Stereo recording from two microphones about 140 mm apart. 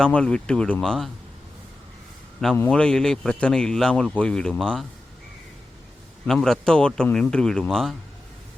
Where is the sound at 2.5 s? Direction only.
10° left (ahead or behind).